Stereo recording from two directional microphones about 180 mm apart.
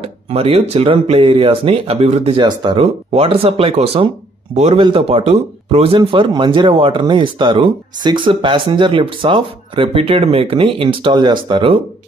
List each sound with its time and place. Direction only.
0.0 s speech: 35° right (ahead or behind)